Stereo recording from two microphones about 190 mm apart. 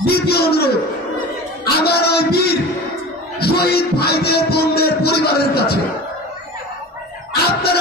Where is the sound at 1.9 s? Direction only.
55° left (ahead or behind).